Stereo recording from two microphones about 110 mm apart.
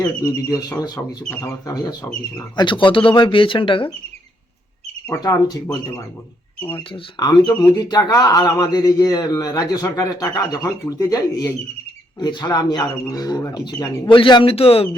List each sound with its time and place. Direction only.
0.2 s speech: 30° left (ahead or behind)
2.6 s speech: 50° left (ahead or behind)
6.9 s speech: 40° left (ahead or behind); by 14.8 s 60° left (ahead or behind)